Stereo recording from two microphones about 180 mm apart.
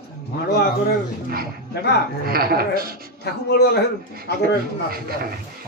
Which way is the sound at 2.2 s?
55° right (ahead or behind).